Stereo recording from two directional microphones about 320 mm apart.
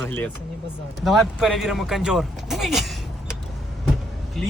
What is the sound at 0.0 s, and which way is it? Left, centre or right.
Speech, centre.